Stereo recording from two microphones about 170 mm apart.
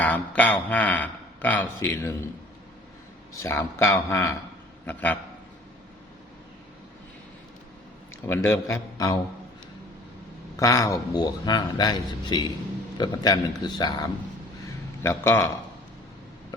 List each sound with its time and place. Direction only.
0.0 s a man's voice: 10° left (ahead or behind)
3.4 s a man's voice: 15° left (ahead or behind)
8.3 s a man's voice: 15° left (ahead or behind)
10.6 s speech: 15° left (ahead or behind)
15.0 s a man's voice: 15° left (ahead or behind)